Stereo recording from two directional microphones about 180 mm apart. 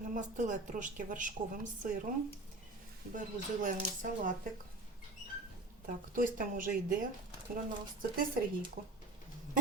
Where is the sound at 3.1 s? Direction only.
45° right (ahead or behind).